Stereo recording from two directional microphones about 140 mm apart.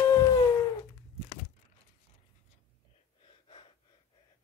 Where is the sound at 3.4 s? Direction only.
40° left (ahead or behind).